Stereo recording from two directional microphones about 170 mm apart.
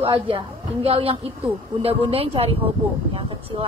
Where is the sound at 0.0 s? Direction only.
35° right (ahead or behind).